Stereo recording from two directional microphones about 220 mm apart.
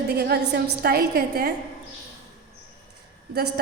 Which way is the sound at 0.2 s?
45° right (ahead or behind).